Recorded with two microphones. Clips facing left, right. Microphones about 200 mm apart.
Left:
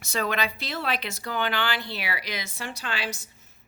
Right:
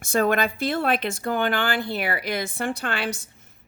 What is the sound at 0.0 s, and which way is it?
Speech, 50° right (ahead or behind).